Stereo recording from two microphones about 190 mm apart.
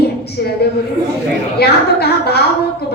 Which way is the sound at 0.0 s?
55° left (ahead or behind).